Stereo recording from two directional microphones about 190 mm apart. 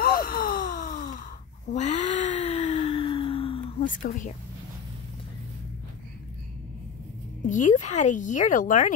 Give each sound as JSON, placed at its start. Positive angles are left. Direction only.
{"t": 0.0, "sound": "a sound", "side_deg": 50}
{"t": 3.8, "sound": "speech", "side_deg": 45}
{"t": 7.4, "sound": "speech", "side_deg": 45}